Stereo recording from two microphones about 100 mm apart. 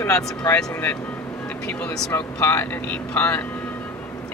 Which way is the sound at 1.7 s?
10° left (ahead or behind).